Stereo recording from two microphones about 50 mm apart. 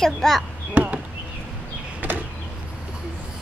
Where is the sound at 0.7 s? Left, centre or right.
Right.